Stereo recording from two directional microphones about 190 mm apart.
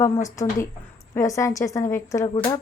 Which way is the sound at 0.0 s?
15° left (ahead or behind).